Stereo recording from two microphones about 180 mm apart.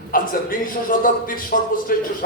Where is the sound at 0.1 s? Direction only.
50° left (ahead or behind).